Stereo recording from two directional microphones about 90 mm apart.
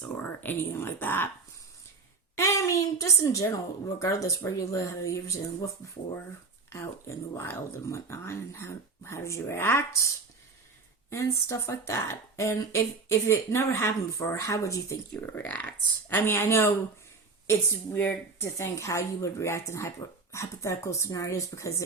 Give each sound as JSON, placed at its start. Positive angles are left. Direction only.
{"t": 0.2, "sound": "speech", "side_deg": 25}
{"t": 2.3, "sound": "speech", "side_deg": 35}
{"t": 11.1, "sound": "speech", "side_deg": 35}
{"t": 15.3, "sound": "speech", "side_deg": 20}